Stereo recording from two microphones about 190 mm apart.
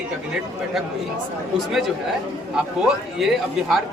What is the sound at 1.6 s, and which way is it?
Speech, centre (ahead or behind).